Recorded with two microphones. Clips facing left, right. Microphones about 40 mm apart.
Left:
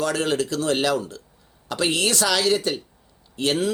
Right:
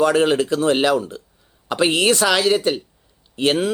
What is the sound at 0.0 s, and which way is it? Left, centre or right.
Speech, right.